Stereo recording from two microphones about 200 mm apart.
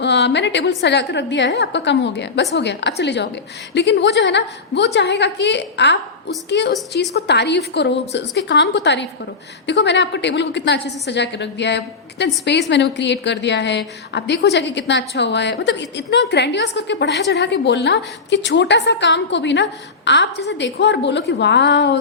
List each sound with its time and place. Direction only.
0.0 s a woman's voice: 60° left (ahead or behind)